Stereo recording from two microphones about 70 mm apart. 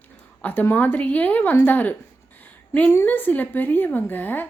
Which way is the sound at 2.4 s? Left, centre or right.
Left.